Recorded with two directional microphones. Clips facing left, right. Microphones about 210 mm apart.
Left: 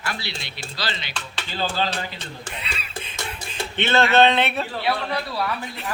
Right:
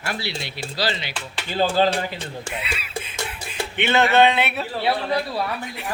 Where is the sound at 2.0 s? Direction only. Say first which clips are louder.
Right 4 dB; 10° right (ahead or behind).